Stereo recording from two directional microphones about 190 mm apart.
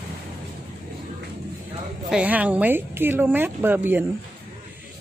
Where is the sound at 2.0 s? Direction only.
5° right (ahead or behind).